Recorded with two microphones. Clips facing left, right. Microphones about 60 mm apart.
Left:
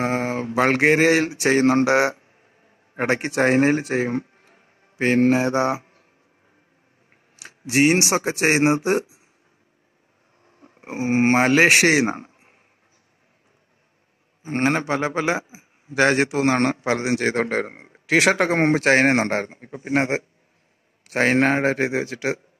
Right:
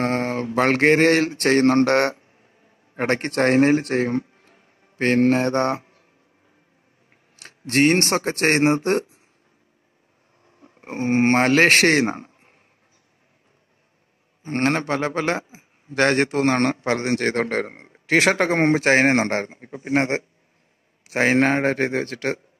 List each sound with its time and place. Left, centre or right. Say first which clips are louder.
0.0 s a sound: even; centre
2.4 s a man's voice: even; centre
4.4 s music: even; left
4.9 s a man's voice: even; centre
7.3 s speech: even; centre
10.4 s a sound: even; centre
11.2 s a man's voice: even; centre
14.4 s a man's voice: even; centre